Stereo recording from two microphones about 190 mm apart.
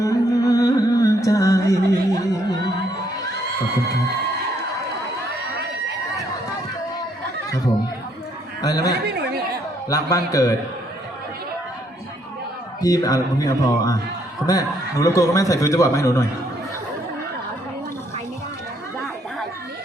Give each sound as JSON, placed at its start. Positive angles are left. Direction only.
{"t": 0.0, "sound": "music", "side_deg": 15}
{"t": 8.6, "sound": "a sound", "side_deg": 20}
{"t": 9.9, "sound": "speech", "side_deg": 15}
{"t": 12.8, "sound": "speech", "side_deg": 20}
{"t": 18.9, "sound": "chatter", "side_deg": 0}